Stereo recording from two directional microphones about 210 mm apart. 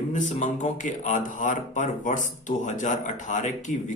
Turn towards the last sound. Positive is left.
turn(degrees=35)  # may be behind; listen again after turning